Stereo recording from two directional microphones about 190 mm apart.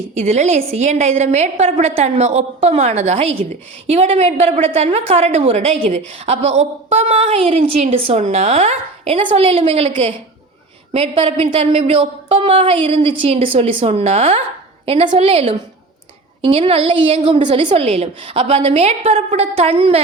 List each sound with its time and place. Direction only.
0.1 s a woman's voice: 35° right (ahead or behind)
10.9 s a woman's voice: 30° right (ahead or behind)